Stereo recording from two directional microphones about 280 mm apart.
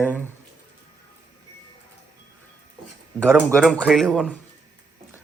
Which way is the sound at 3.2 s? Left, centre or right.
Centre.